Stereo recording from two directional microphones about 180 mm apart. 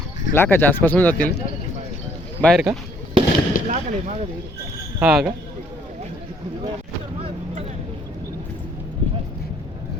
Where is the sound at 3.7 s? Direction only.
40° right (ahead or behind).